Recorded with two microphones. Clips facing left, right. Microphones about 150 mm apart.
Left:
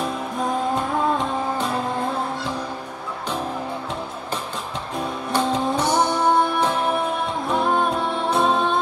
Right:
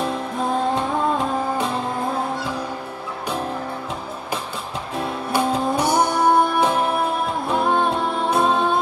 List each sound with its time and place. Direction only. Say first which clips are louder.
0.7 s music: right 1 dB; centre (ahead or behind)
4.9 s music: right 1 dB; 5° right (ahead or behind)